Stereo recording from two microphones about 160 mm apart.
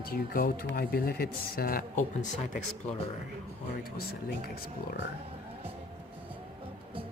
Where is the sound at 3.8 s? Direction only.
75° left (ahead or behind).